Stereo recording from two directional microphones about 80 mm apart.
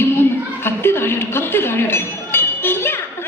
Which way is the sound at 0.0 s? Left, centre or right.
Left.